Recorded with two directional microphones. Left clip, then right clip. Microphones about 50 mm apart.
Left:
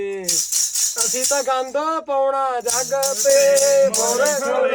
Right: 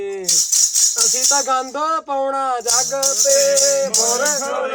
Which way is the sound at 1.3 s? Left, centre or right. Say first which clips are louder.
Right 2 dB; right.